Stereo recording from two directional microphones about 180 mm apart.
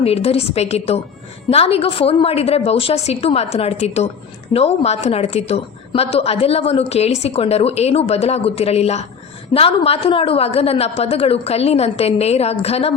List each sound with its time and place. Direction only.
0.0 s a woman's voice: 35° left (ahead or behind)